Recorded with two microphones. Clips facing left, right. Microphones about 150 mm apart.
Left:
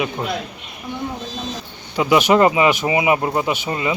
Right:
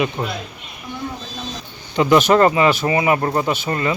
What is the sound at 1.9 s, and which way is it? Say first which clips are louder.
A man's voice: right 1 dB; 5° left (ahead or behind).